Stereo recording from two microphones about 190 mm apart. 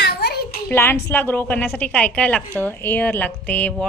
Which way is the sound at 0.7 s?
10° left (ahead or behind).